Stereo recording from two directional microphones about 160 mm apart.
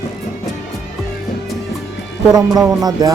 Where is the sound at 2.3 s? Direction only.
25° right (ahead or behind).